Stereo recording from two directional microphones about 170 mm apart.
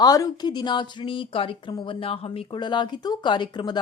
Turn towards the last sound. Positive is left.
turn(degrees=25)  # may be behind; listen again after turning